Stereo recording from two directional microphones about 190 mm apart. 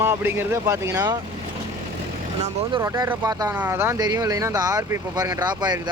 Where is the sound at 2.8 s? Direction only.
15° right (ahead or behind).